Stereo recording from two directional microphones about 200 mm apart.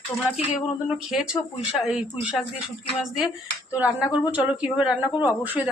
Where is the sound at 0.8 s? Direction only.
5° right (ahead or behind).